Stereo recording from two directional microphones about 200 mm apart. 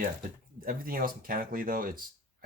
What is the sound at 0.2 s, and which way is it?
Speech, 45° right (ahead or behind).